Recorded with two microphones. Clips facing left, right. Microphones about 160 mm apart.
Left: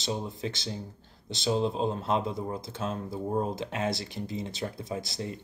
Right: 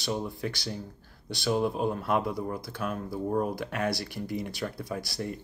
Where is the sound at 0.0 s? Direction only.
20° left (ahead or behind).